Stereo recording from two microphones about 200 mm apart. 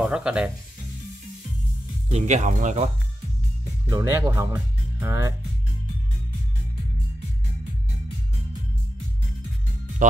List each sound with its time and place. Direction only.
0.0 s speech: 5° right (ahead or behind)
2.0 s speech: 35° right (ahead or behind)
3.9 s speech: 15° right (ahead or behind)